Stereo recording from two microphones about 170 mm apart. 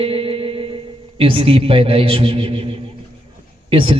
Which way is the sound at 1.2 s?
30° right (ahead or behind).